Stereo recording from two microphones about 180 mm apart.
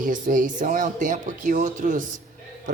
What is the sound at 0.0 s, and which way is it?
Speech, 50° right (ahead or behind).